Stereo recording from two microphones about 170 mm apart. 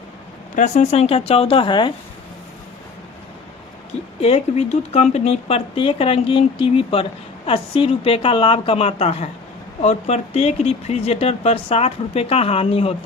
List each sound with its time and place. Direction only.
0.5 s speech: 40° left (ahead or behind)
4.2 s speech: 40° left (ahead or behind)